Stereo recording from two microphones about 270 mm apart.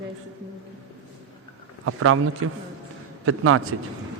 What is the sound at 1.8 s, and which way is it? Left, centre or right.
A man's voice, right.